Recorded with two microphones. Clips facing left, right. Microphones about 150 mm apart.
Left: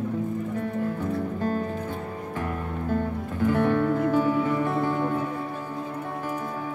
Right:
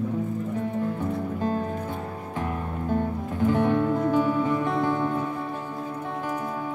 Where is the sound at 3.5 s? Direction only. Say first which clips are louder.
Left 1 dB; 20° right (ahead or behind).